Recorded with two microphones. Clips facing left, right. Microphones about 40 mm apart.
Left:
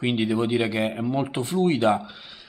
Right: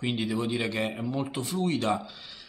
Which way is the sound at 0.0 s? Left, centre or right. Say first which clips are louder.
Left 6 dB; left.